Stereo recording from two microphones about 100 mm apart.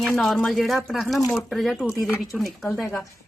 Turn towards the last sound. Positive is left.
turn(degrees=0)  # may be behind; listen again after turning